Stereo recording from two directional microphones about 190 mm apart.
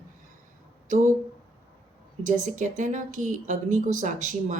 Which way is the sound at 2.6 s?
40° right (ahead or behind).